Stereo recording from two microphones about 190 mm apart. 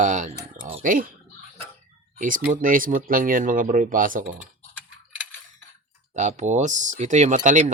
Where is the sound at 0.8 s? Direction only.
45° right (ahead or behind).